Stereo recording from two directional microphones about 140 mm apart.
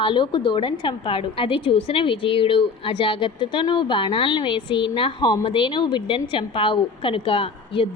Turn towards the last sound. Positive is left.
turn(degrees=40)  # may be behind; listen again after turning